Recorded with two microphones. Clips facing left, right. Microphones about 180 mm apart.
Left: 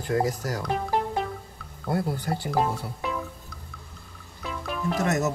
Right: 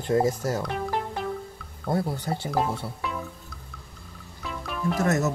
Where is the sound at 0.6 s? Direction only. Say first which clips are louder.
Left 2 dB; centre (ahead or behind).